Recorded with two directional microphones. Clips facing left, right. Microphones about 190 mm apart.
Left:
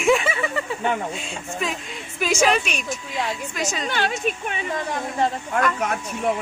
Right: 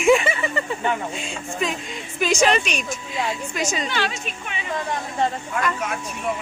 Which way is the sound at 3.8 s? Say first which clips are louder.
Left 3 dB; 50° left (ahead or behind).